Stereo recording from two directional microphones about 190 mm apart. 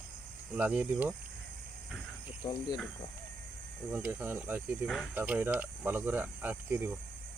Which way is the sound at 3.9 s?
10° right (ahead or behind).